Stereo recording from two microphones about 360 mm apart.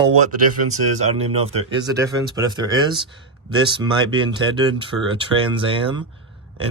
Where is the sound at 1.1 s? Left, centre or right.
Centre.